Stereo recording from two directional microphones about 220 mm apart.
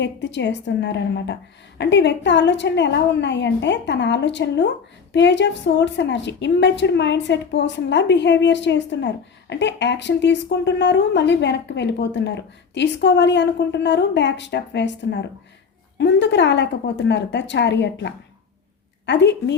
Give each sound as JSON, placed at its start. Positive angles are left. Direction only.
{"t": 0.0, "sound": "a woman's voice", "side_deg": 55}